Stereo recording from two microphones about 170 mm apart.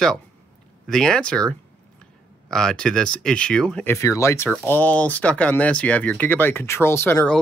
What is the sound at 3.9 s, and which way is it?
Speech, 15° left (ahead or behind).